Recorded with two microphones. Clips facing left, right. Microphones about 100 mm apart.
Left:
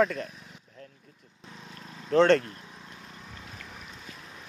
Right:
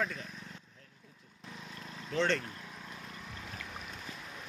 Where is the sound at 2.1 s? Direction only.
60° left (ahead or behind).